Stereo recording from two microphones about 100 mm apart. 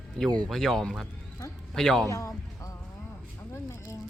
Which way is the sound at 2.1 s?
35° left (ahead or behind).